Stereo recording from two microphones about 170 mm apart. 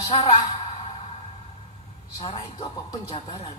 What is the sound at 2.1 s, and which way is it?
A woman's voice, 30° left (ahead or behind).